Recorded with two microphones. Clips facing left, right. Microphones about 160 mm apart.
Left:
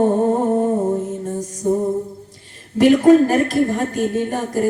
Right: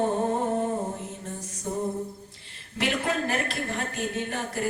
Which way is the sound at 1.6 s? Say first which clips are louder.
Left 13 dB; 50° left (ahead or behind).